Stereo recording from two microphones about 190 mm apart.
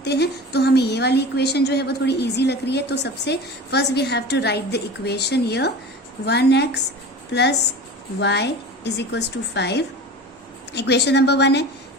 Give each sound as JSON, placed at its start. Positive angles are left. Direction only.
{"t": 0.0, "sound": "a woman's voice", "side_deg": 60}